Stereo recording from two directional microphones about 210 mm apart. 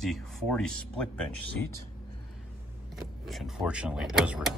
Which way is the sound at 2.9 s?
Centre (ahead or behind).